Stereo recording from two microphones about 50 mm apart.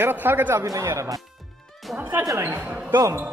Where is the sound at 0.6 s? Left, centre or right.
Right.